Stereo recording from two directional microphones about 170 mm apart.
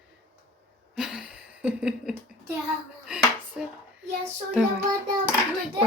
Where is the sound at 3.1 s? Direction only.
5° right (ahead or behind).